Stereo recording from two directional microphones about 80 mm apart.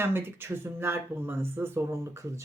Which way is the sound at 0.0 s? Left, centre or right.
Right.